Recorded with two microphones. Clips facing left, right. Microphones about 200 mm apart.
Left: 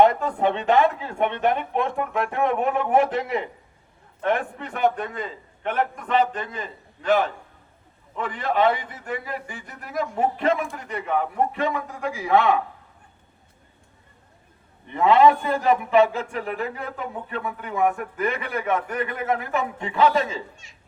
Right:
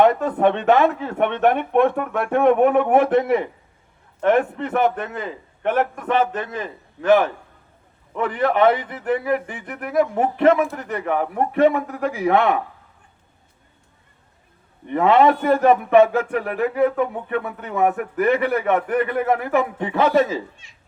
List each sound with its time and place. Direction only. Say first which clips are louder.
0.0 s a man's voice: right 3 dB; 60° right (ahead or behind)
8.1 s a man's voice: right 5 dB; 60° right (ahead or behind)
14.9 s a man's voice: right 1 dB; 60° right (ahead or behind)